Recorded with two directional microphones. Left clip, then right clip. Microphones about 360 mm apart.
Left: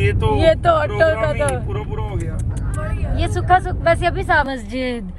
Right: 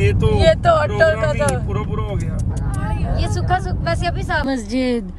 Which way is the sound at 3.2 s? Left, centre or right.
Centre.